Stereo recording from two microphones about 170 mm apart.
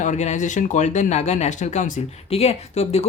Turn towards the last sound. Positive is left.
turn(degrees=40)  # may be behind; listen again after turning